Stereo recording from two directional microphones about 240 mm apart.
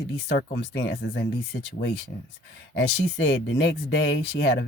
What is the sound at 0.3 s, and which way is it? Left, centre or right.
Speech, left.